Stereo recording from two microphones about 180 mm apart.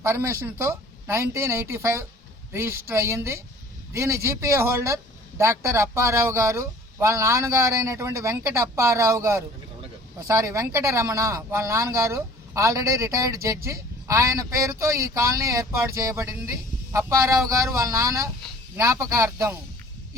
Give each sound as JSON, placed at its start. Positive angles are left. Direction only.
{"t": 0.0, "sound": "speech", "side_deg": -15}